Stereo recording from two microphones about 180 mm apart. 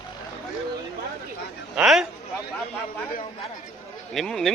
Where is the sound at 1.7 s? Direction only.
5° right (ahead or behind).